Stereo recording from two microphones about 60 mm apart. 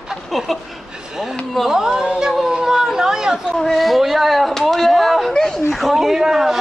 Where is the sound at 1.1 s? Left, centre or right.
Centre.